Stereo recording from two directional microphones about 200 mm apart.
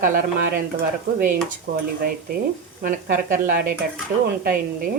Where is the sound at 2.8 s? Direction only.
40° right (ahead or behind).